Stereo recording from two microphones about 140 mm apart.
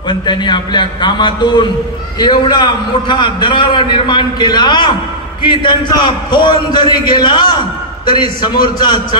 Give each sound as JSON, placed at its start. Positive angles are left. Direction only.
{"t": 0.1, "sound": "a man's voice", "side_deg": 30}